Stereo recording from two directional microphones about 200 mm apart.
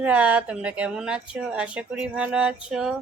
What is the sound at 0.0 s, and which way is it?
Speech, 10° right (ahead or behind).